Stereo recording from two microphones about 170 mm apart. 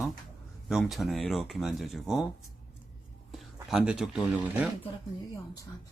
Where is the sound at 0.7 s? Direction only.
Centre (ahead or behind).